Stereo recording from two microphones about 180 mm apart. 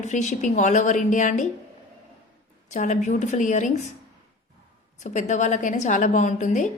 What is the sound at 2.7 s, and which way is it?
A woman's voice, 40° left (ahead or behind).